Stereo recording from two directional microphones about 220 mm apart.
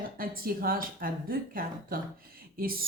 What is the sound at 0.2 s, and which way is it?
Speech, 40° right (ahead or behind).